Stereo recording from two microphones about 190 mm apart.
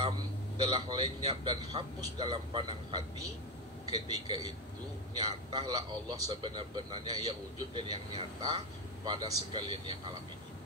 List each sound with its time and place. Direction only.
0.6 s a man's voice: 25° right (ahead or behind)